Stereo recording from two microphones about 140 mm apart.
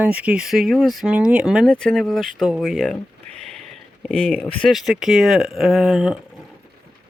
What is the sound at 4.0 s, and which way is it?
Speech, centre (ahead or behind).